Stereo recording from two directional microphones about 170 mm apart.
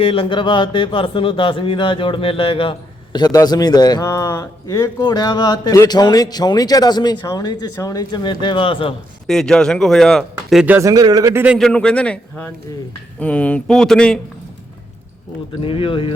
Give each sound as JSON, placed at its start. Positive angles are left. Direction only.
{"t": 0.0, "sound": "speech", "side_deg": 30}
{"t": 9.2, "sound": "speech", "side_deg": 5}
{"t": 10.7, "sound": "speech", "side_deg": -15}
{"t": 11.4, "sound": "speech", "side_deg": 0}
{"t": 15.6, "sound": "speech", "side_deg": 30}